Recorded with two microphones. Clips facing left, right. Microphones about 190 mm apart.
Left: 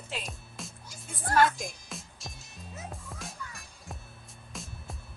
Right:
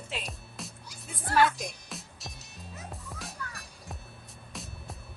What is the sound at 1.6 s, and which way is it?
Music, centre (ahead or behind).